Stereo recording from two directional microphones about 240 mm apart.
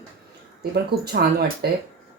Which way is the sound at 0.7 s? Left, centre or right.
Right.